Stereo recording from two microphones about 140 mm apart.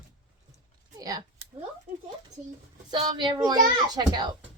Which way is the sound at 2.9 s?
35° right (ahead or behind).